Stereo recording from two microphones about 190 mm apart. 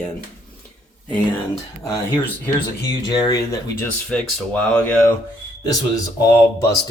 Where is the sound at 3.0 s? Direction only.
20° left (ahead or behind).